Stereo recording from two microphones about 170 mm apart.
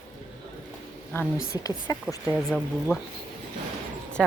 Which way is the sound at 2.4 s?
Centre (ahead or behind).